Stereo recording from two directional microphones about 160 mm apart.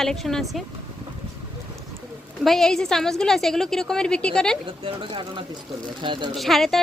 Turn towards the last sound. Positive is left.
turn(degrees=0)  # may be behind; listen again after turning